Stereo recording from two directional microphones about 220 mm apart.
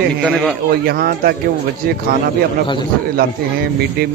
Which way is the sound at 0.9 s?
45° right (ahead or behind).